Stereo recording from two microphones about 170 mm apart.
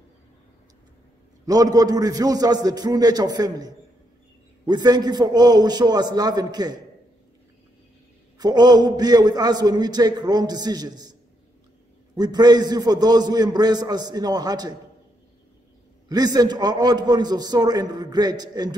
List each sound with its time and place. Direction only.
1.4 s a man's voice: 20° right (ahead or behind)
8.4 s a man's voice: 25° right (ahead or behind)
12.2 s a man's voice: 25° right (ahead or behind)
16.1 s a man's voice: 20° right (ahead or behind)